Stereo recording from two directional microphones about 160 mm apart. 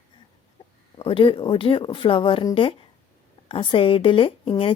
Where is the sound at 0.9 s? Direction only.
35° left (ahead or behind).